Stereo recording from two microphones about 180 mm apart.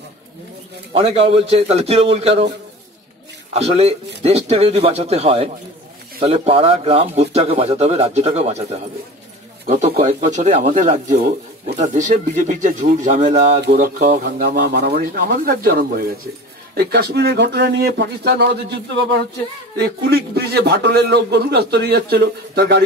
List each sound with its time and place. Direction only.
0.9 s speech: 35° right (ahead or behind)
3.5 s speech: 35° right (ahead or behind)
14.4 s a man's voice: 65° right (ahead or behind)
19.8 s a man's voice: 60° right (ahead or behind)